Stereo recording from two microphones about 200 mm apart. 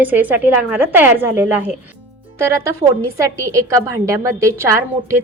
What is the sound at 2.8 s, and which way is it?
A woman's voice, 15° right (ahead or behind).